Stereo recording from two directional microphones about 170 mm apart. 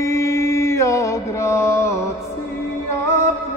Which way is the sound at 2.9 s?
15° left (ahead or behind).